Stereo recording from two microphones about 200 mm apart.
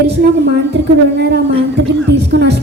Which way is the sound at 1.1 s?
55° right (ahead or behind).